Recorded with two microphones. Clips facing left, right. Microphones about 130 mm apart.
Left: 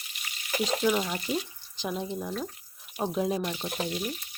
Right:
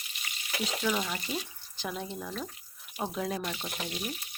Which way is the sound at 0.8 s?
20° left (ahead or behind).